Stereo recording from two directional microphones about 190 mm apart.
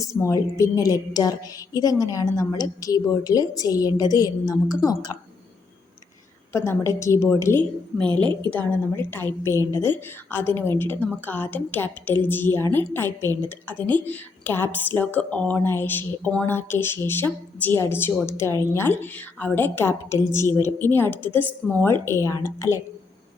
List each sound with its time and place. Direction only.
0.0 s a woman's voice: 15° left (ahead or behind)
6.5 s a woman's voice: 15° left (ahead or behind)